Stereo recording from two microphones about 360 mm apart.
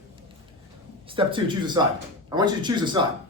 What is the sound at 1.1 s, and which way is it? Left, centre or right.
Speech, centre.